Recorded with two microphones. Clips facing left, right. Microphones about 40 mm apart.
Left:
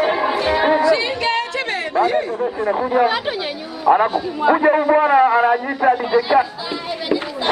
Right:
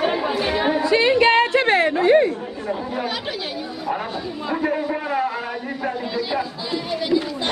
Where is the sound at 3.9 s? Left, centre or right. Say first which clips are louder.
Left 12 dB; left.